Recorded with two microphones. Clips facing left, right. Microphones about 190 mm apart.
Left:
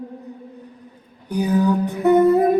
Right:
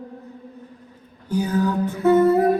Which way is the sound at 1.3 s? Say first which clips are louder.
Left 3 dB; 15° left (ahead or behind).